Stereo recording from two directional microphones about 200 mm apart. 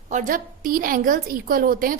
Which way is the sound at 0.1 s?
40° right (ahead or behind).